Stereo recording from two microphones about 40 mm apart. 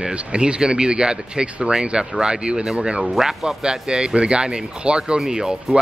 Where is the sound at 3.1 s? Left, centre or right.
Centre.